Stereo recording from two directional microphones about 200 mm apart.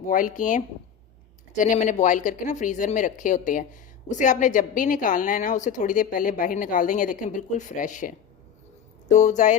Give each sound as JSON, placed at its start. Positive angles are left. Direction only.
{"t": 0.1, "sound": "speech", "side_deg": 40}
{"t": 9.1, "sound": "speech", "side_deg": 35}